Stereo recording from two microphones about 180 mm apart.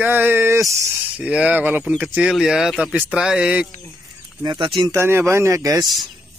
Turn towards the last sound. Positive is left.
turn(degrees=-20)  # may be behind; listen again after turning